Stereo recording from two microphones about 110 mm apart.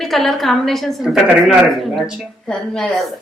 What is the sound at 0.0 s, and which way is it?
A woman's voice, centre (ahead or behind).